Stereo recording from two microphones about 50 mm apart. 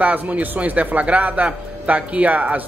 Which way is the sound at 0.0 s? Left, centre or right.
Right.